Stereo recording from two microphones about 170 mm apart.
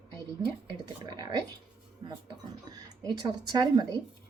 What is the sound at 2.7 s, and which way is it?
Speech, 25° right (ahead or behind).